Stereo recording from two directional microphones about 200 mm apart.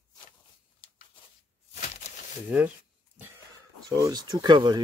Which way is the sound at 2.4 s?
5° right (ahead or behind).